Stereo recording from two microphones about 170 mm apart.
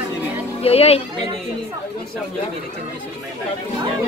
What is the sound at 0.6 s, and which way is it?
Speech, 35° left (ahead or behind).